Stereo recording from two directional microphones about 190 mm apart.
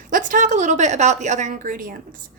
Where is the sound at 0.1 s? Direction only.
45° right (ahead or behind).